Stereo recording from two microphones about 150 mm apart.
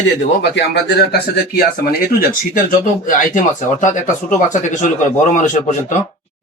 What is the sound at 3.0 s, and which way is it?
Speech, 60° left (ahead or behind).